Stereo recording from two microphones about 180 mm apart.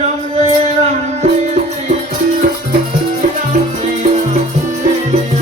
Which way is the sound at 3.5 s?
40° right (ahead or behind).